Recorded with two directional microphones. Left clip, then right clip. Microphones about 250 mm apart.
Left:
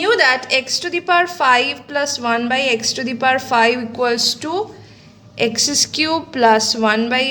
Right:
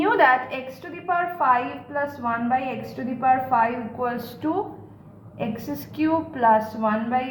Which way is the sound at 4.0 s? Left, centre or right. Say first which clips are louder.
Left 9 dB; left.